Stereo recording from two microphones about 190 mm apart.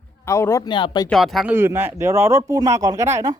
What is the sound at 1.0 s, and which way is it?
Speech, centre (ahead or behind).